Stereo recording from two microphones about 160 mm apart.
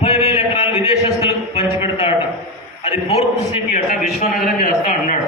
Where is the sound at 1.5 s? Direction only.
35° left (ahead or behind).